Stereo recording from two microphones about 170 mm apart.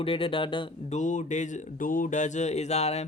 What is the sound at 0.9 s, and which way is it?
Speech, 45° left (ahead or behind).